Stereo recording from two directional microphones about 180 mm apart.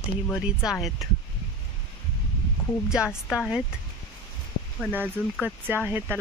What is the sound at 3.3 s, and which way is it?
Speech, 5° right (ahead or behind).